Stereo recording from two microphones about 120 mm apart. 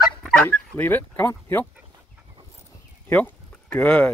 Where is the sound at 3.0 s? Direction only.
15° left (ahead or behind).